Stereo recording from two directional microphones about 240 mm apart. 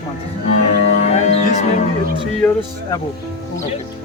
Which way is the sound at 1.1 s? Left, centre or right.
Left.